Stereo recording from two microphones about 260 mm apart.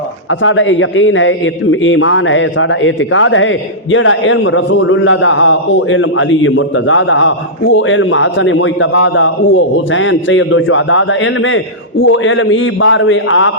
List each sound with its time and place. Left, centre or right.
0.3 s a man's voice: left